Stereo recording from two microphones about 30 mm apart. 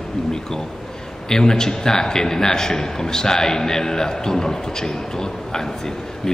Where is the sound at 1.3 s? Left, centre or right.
Left.